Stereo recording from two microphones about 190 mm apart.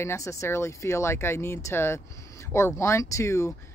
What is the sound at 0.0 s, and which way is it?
Speech, 15° left (ahead or behind).